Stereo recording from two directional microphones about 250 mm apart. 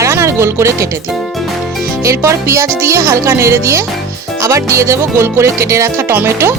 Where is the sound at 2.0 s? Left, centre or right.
Centre.